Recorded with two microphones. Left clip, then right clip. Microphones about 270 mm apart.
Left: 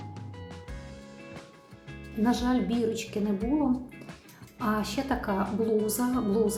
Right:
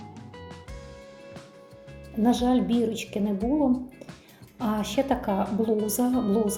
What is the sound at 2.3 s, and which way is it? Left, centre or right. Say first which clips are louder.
A woman's voice: right 4 dB; centre.